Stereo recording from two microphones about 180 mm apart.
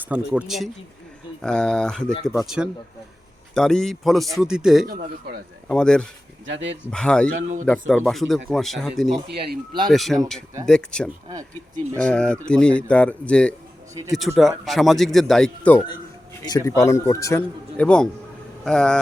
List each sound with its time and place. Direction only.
0.0 s speech: 10° right (ahead or behind)
4.9 s a man's voice: 50° right (ahead or behind)
5.6 s speech: 5° left (ahead or behind)
6.4 s speech: 90° right
6.9 s speech: 5° left (ahead or behind)
9.3 s speech: 65° right (ahead or behind)
9.9 s a man's voice: centre (ahead or behind)
16.4 s a man's voice: 20° left (ahead or behind); by 18.9 s 5° left (ahead or behind)